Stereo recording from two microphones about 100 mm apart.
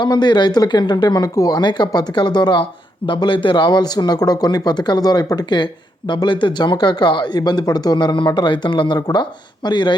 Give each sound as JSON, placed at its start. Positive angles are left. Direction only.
{"t": 0.0, "sound": "speech", "side_deg": 45}
{"t": 9.0, "sound": "speech", "side_deg": 40}
{"t": 9.6, "sound": "speech", "side_deg": 50}